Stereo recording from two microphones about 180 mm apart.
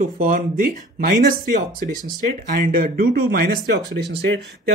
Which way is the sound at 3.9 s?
70° right (ahead or behind).